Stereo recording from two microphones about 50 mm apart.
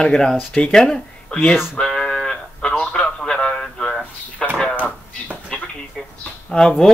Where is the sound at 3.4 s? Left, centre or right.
Centre.